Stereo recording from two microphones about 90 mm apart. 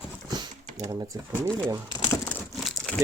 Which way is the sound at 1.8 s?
55° left (ahead or behind).